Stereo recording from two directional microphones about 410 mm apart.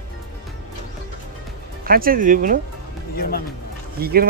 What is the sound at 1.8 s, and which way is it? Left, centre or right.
Speech, right.